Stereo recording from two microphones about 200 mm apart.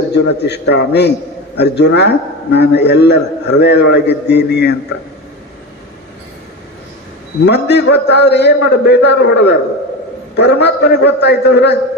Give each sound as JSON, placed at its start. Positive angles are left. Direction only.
{"t": 0.4, "sound": "a man's voice", "side_deg": 55}
{"t": 7.4, "sound": "a man's voice", "side_deg": 55}